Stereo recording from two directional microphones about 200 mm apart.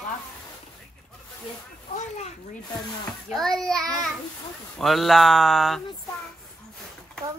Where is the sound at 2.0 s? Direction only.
35° left (ahead or behind).